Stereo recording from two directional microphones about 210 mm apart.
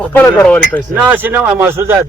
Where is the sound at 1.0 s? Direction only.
10° right (ahead or behind).